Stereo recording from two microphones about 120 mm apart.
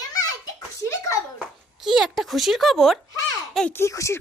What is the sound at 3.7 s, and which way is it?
Speech, 25° left (ahead or behind).